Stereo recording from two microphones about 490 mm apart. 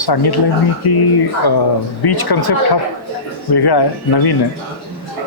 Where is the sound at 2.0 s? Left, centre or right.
Left.